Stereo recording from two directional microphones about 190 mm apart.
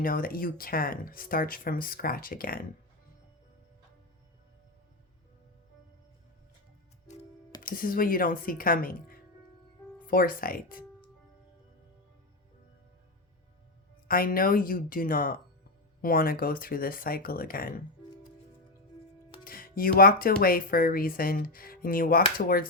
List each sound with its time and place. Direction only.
0.0 s speech: 50° left (ahead or behind)
7.6 s speech: 50° left (ahead or behind)
14.1 s speech: 50° left (ahead or behind)
19.5 s speech: 50° left (ahead or behind)